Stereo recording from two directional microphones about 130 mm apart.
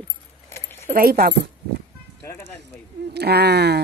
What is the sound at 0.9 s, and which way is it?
Speech, 65° right (ahead or behind).